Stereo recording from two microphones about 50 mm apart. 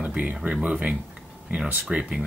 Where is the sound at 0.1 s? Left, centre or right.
Right.